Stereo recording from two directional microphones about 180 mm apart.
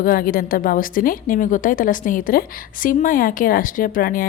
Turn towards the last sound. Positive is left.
turn(degrees=50)  # may be behind; listen again after turning